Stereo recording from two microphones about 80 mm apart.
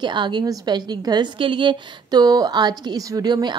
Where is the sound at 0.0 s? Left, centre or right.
Right.